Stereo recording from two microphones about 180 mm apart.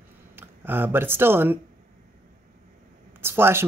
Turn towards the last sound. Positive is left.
turn(degrees=-15)  # may be behind; listen again after turning